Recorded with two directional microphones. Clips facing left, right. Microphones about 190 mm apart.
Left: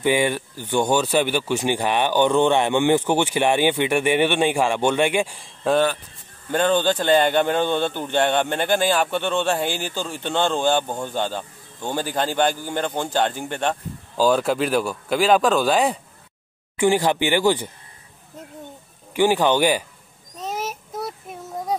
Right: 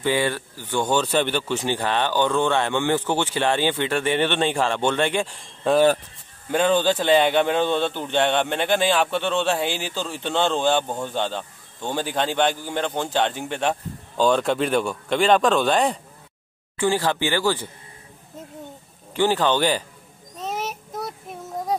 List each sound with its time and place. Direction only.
0.0 s speech: 15° left (ahead or behind)
16.7 s speech: 15° left (ahead or behind)
19.1 s speech: 15° left (ahead or behind)
20.3 s child singing: centre (ahead or behind)